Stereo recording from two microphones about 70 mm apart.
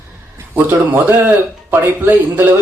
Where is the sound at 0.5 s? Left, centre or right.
Right.